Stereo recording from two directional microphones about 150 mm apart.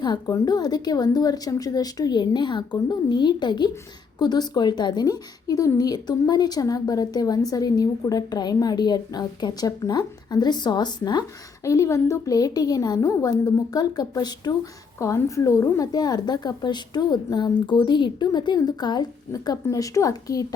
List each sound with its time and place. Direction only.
0.0 s a woman's voice: 25° left (ahead or behind)